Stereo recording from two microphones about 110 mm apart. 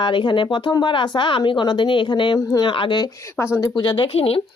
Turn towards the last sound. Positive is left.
turn(degrees=60)  # may be behind; listen again after turning